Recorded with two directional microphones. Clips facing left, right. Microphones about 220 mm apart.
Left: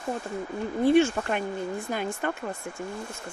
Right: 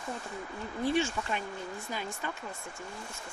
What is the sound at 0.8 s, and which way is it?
Speech, 55° left (ahead or behind).